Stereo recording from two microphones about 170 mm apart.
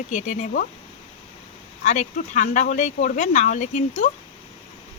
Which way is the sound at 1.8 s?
45° left (ahead or behind).